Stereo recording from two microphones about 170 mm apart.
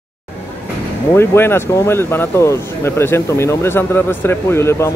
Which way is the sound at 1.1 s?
15° left (ahead or behind).